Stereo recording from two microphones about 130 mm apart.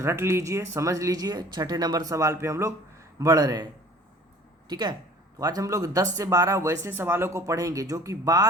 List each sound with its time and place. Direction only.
0.0 s speech: 20° right (ahead or behind)
4.7 s speech: 35° right (ahead or behind)